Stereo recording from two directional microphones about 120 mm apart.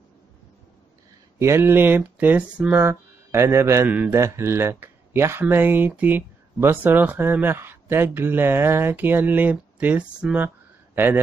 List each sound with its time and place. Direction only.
1.4 s speech: 20° right (ahead or behind)